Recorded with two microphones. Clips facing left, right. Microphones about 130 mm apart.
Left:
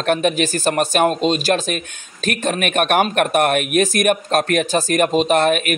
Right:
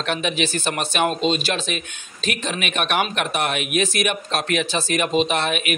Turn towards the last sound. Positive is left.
turn(degrees=45)  # may be behind; listen again after turning